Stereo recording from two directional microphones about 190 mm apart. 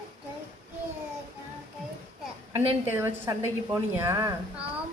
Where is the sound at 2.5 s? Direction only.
15° right (ahead or behind).